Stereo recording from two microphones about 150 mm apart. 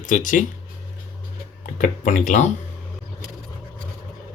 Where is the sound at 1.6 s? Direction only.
60° left (ahead or behind).